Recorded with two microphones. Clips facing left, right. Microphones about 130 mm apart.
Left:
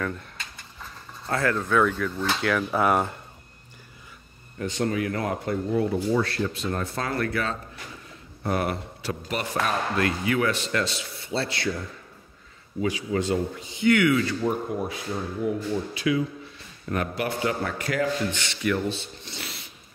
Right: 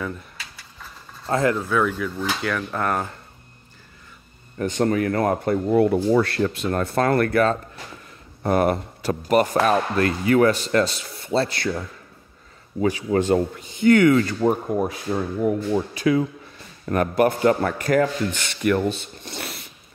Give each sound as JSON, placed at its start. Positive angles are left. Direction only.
{"t": 0.0, "sound": "keys jangling", "side_deg": -5}
{"t": 1.2, "sound": "speech", "side_deg": -20}
{"t": 1.6, "sound": "speech", "side_deg": -5}
{"t": 4.6, "sound": "speech", "side_deg": -50}
{"t": 12.8, "sound": "speech", "side_deg": -50}